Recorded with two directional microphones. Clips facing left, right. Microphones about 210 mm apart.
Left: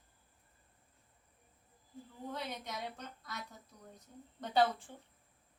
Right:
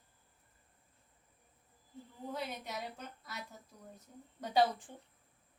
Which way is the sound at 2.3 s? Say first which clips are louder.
Right 1 dB; 5° right (ahead or behind).